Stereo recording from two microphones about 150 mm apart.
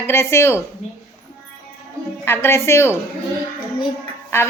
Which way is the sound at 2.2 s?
15° left (ahead or behind).